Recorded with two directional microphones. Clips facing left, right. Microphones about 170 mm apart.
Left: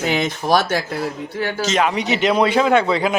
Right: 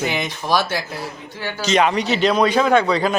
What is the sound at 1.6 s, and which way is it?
A man's voice, 5° left (ahead or behind).